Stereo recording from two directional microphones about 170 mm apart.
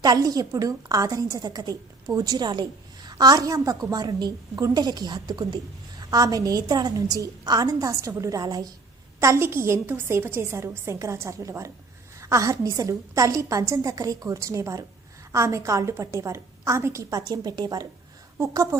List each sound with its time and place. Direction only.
0.0 s a woman's voice: 20° right (ahead or behind)